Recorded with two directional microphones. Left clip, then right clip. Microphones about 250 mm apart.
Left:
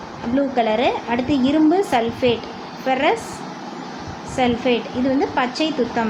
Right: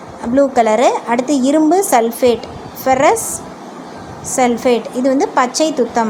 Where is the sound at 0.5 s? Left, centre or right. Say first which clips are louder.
Right 4 dB; right.